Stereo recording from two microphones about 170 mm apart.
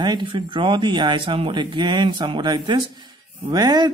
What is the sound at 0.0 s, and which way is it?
A man's voice, 30° right (ahead or behind).